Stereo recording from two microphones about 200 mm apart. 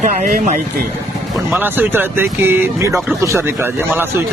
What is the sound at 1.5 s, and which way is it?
Speech, 10° right (ahead or behind).